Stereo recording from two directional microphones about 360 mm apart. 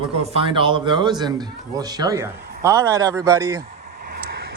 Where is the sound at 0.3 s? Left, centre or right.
Centre.